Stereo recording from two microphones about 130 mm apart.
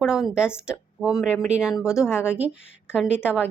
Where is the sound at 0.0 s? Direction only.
5° right (ahead or behind).